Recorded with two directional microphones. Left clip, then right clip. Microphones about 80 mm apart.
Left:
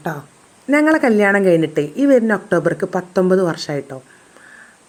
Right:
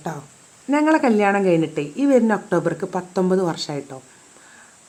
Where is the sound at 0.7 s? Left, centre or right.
Left.